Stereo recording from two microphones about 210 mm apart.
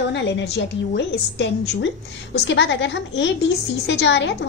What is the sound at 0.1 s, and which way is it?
A woman's voice, 55° left (ahead or behind).